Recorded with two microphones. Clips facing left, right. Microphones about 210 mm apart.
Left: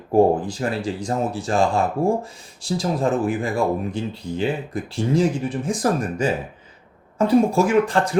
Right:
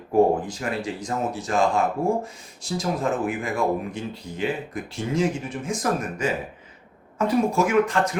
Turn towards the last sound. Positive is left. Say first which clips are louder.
# left 3 dB
turn(degrees=30)  # may be behind; listen again after turning